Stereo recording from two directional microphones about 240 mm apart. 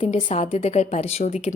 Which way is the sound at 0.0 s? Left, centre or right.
Left.